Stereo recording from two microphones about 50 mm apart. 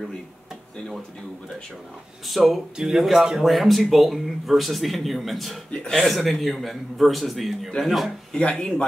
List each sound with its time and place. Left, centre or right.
2.2 s a man's voice: centre
6.1 s a man's voice: centre
8.4 s speech: centre